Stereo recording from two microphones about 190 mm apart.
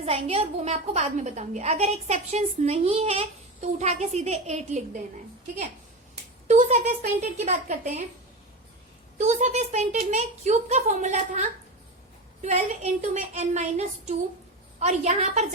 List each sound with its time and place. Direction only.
0.0 s a woman's voice: 30° right (ahead or behind)
6.5 s a woman's voice: 40° right (ahead or behind)
9.1 s a woman's voice: 40° right (ahead or behind)